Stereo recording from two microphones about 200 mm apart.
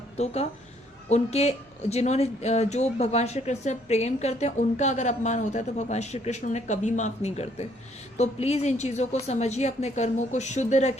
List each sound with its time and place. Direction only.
0.2 s speech: 35° left (ahead or behind)